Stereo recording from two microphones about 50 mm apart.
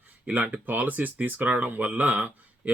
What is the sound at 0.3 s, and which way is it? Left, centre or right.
A man's voice, right.